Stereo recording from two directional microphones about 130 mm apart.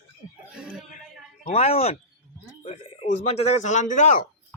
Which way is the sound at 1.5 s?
50° left (ahead or behind).